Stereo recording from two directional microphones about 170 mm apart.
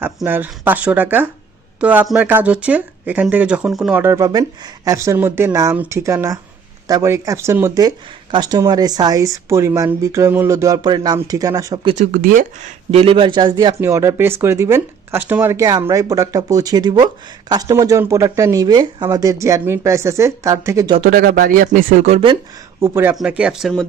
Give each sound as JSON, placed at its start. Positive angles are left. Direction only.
{"t": 0.2, "sound": "speech", "side_deg": -10}
{"t": 11.9, "sound": "speech", "side_deg": -55}
{"t": 12.9, "sound": "speech", "side_deg": -35}
{"t": 21.0, "sound": "speech", "side_deg": -60}
{"t": 22.8, "sound": "speech", "side_deg": -15}
{"t": 23.4, "sound": "speech", "side_deg": 0}